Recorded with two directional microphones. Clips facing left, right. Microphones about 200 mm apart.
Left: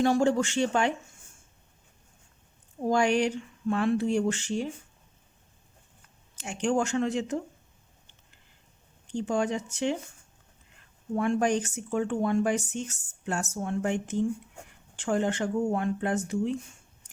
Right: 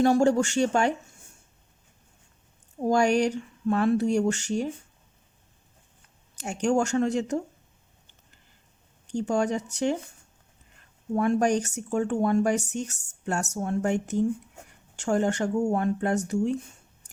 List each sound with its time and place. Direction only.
0.0 s speech: 40° right (ahead or behind)
2.8 s speech: 40° right (ahead or behind)
6.3 s speech: 40° right (ahead or behind)
9.1 s speech: 45° right (ahead or behind)
11.1 s speech: 40° right (ahead or behind)